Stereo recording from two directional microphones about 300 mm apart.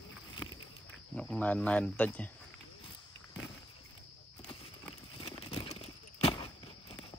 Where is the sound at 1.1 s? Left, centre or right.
Centre.